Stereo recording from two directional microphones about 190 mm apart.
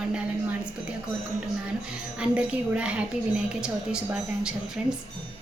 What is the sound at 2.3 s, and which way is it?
A woman's voice, 5° right (ahead or behind).